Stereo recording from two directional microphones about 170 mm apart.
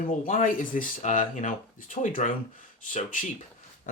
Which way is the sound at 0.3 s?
50° left (ahead or behind).